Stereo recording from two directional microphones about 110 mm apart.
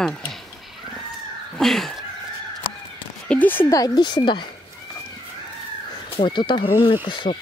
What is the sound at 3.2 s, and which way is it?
Speech, 15° left (ahead or behind).